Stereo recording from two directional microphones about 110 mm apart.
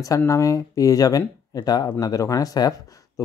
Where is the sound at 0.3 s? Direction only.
30° left (ahead or behind).